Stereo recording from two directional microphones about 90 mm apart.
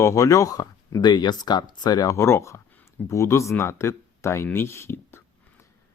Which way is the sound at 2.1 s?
30° left (ahead or behind).